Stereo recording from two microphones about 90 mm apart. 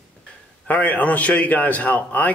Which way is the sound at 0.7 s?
15° left (ahead or behind).